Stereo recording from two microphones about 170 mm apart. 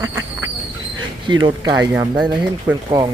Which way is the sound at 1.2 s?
25° right (ahead or behind).